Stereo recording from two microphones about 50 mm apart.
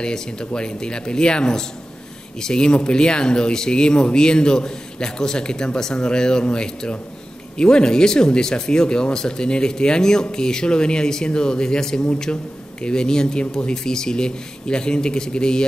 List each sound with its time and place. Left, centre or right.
0.0 s speech: centre